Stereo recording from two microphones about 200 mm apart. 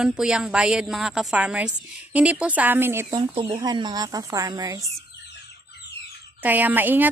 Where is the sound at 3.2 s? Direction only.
25° right (ahead or behind).